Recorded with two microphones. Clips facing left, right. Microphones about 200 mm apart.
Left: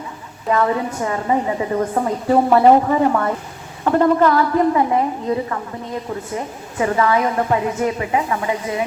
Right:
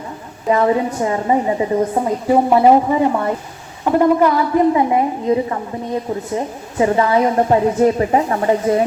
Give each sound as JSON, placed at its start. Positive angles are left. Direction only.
{"t": 0.4, "sound": "a woman's voice", "side_deg": -20}